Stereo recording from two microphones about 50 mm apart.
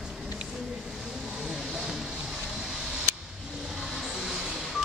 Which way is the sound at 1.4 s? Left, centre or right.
Centre.